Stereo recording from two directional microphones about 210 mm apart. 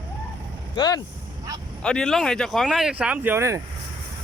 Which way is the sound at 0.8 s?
20° left (ahead or behind).